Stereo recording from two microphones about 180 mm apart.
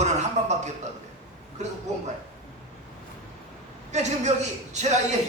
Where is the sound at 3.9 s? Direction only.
40° right (ahead or behind).